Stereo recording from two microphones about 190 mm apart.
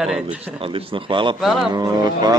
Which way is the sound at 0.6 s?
30° right (ahead or behind).